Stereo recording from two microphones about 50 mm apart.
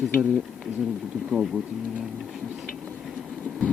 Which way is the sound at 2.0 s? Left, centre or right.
Centre.